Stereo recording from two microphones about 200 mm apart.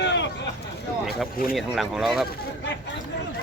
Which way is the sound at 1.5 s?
Centre (ahead or behind).